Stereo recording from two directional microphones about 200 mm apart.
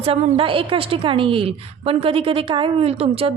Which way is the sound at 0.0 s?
30° right (ahead or behind).